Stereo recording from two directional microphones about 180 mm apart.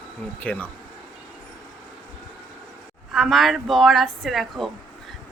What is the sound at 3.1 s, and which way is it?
A woman's voice, centre (ahead or behind).